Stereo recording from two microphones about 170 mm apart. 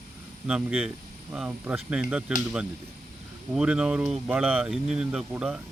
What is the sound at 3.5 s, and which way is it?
Speech, 5° right (ahead or behind).